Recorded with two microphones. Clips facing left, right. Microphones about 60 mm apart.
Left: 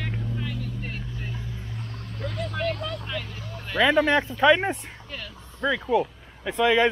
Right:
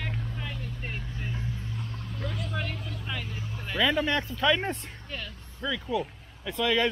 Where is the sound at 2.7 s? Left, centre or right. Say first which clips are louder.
Left 9 dB; left.